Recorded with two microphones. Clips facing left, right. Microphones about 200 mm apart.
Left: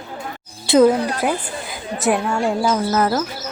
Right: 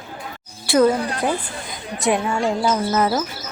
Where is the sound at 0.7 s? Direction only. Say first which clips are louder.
Left 3 dB; 20° left (ahead or behind).